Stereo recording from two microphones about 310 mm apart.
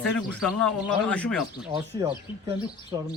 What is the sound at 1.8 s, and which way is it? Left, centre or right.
Speech, centre.